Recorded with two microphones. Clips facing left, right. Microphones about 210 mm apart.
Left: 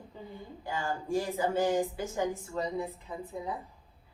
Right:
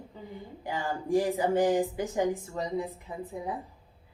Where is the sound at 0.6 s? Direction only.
15° right (ahead or behind).